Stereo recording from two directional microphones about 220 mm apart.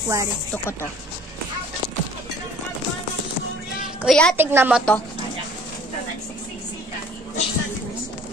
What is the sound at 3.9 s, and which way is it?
Speech, centre (ahead or behind).